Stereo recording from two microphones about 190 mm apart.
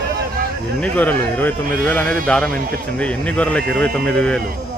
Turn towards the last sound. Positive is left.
turn(degrees=5)  # may be behind; listen again after turning